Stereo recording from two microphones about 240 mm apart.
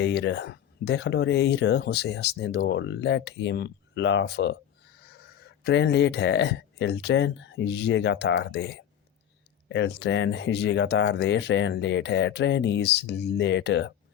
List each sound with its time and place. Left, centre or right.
0.0 s speech: left